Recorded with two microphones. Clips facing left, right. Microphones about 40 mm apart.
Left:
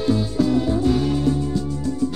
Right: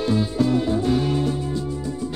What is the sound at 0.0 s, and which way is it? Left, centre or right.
Music, centre.